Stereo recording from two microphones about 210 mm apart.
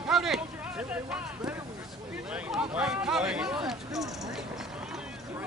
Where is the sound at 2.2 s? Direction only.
5° right (ahead or behind).